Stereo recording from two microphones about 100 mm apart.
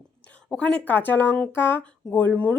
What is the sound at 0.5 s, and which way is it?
Speech, 10° left (ahead or behind).